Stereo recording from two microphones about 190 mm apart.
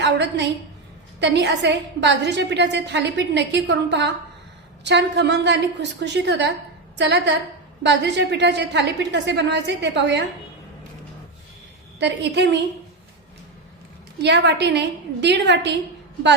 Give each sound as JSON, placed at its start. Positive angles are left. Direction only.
{"t": 0.0, "sound": "a sound", "side_deg": -65}
{"t": 1.2, "sound": "a woman's voice", "side_deg": -65}
{"t": 11.9, "sound": "a woman's voice", "side_deg": -65}
{"t": 14.2, "sound": "a woman's voice", "side_deg": -65}